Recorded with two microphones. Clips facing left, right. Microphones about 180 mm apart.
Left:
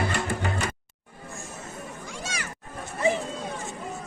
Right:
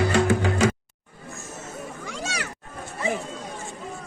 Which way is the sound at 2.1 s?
70° right (ahead or behind).